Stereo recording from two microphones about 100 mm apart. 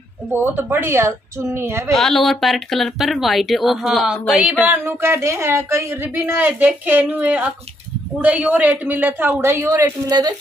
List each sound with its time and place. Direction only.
0.3 s a woman's voice: 20° right (ahead or behind)
2.0 s speech: 5° left (ahead or behind)
4.6 s a woman's voice: 25° right (ahead or behind); by 10.3 s 40° right (ahead or behind)